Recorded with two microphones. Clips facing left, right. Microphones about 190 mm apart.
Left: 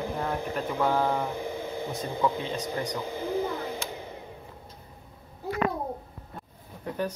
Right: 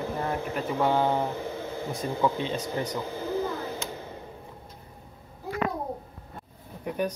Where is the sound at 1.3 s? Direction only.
15° left (ahead or behind).